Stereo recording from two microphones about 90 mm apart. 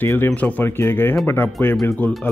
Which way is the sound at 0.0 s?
20° left (ahead or behind).